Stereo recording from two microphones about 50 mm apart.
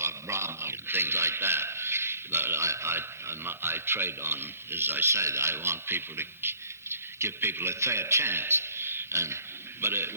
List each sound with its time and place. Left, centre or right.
0.0 s a man's voice: right
5.1 s a man's voice: right
9.1 s speech: right
9.8 s a man's voice: right